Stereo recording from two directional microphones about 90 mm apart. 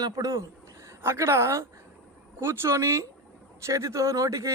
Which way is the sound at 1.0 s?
30° right (ahead or behind).